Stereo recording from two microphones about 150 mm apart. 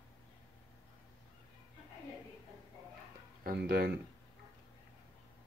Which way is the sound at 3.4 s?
90° right.